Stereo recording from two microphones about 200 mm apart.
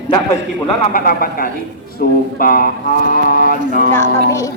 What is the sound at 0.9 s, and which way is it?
Speech, 45° left (ahead or behind).